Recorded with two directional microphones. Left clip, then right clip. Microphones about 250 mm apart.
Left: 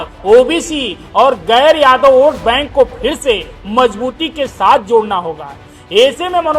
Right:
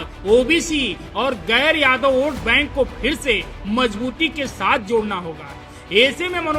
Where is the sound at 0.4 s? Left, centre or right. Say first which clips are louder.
Left 3 dB; centre.